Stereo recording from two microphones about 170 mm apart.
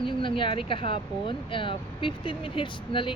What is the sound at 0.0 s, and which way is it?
Speech, 30° left (ahead or behind).